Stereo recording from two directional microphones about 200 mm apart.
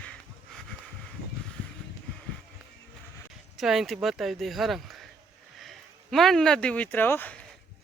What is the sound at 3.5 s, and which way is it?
Speech, centre (ahead or behind).